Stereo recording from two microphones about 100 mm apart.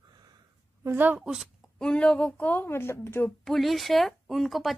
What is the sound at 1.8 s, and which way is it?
Speech, 10° left (ahead or behind).